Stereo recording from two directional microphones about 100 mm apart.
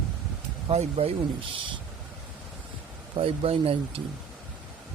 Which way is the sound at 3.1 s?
65° right (ahead or behind).